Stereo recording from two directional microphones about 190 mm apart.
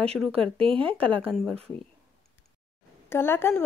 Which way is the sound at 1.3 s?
Centre (ahead or behind).